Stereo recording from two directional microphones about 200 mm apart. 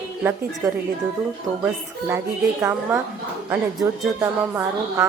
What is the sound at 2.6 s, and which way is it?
A woman's voice, 10° right (ahead or behind).